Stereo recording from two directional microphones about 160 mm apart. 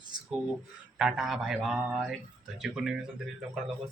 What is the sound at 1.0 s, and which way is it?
Speech, centre (ahead or behind).